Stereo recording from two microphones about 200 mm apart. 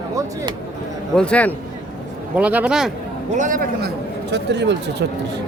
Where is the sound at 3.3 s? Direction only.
40° right (ahead or behind); by 5.0 s 60° right (ahead or behind).